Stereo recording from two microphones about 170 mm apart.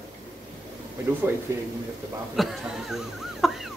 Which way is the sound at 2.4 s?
Centre (ahead or behind).